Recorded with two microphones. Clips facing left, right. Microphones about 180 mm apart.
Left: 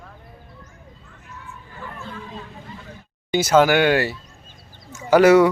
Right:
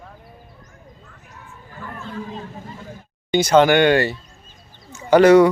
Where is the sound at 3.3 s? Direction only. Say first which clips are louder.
Right 2 dB; 5° left (ahead or behind).